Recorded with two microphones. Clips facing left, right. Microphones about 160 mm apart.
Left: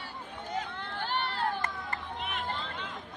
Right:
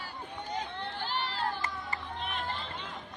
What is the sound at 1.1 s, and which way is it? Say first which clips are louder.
Run: left 3 dB; 55° left (ahead or behind).